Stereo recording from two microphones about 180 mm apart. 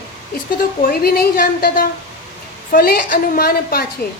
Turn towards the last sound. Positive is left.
turn(degrees=55)  # may be behind; listen again after turning